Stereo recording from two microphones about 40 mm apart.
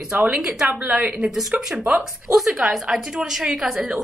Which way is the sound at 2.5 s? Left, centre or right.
Centre.